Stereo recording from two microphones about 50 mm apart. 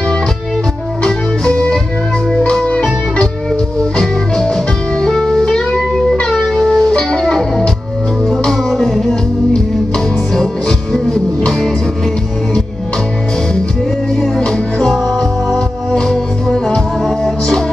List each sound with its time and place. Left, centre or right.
1.0 s music: centre
5.1 s music: centre
14.1 s music: centre